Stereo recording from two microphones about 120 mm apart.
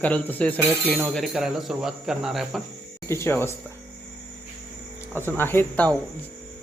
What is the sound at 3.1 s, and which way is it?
Speech, 20° left (ahead or behind).